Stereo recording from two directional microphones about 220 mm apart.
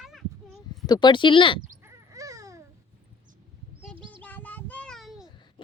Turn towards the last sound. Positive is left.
turn(degrees=0)  # may be behind; listen again after turning